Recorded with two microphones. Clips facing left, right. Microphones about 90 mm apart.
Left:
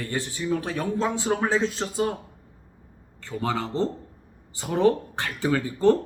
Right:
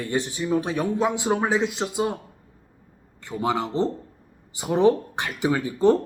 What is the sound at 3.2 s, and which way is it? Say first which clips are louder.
Speech: right 3 dB; 15° right (ahead or behind).